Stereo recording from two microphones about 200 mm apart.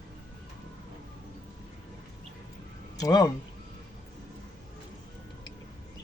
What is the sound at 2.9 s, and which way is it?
Speech, 20° left (ahead or behind).